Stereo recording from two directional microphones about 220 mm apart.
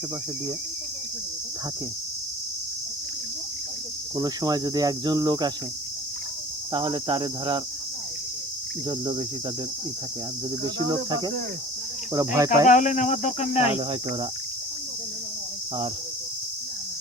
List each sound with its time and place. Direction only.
4.2 s speech: 15° right (ahead or behind)
6.7 s cricket: 20° right (ahead or behind)
8.9 s cricket: 20° right (ahead or behind)
10.8 s speech: 20° right (ahead or behind)
12.6 s speech: 35° left (ahead or behind)